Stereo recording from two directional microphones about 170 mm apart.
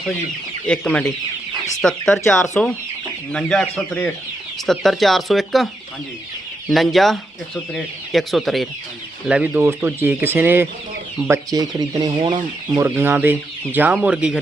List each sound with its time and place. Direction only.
0.7 s speech: 5° left (ahead or behind)
6.7 s speech: centre (ahead or behind); by 12.4 s 25° right (ahead or behind)
12.7 s speech: 15° right (ahead or behind)